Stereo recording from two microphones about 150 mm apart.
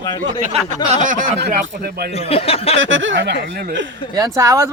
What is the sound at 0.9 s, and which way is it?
Speech, 60° right (ahead or behind).